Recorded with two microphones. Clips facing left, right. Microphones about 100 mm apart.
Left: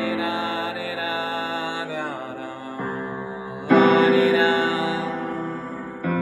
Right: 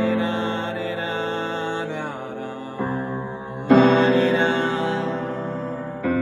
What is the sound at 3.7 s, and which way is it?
Music, 10° left (ahead or behind).